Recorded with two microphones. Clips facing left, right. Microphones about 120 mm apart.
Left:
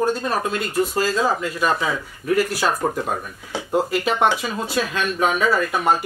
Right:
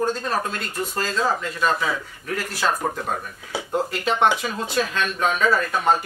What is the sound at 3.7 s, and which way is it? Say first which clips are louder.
Speech: left 3 dB; 5° left (ahead or behind).